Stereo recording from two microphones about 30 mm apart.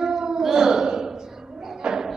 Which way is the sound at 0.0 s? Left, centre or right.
Centre.